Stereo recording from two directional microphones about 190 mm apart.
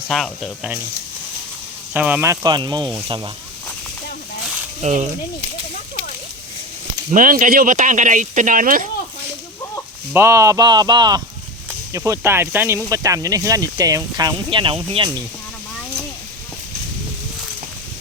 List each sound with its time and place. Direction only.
0.1 s speech: centre (ahead or behind)
1.9 s speech: 10° right (ahead or behind); by 3.2 s 25° right (ahead or behind)
4.8 s speech: 35° right (ahead or behind)
7.1 s speech: 45° right (ahead or behind)
10.1 s speech: 15° right (ahead or behind)